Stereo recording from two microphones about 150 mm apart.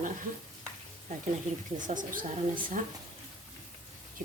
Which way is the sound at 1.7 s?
60° right (ahead or behind).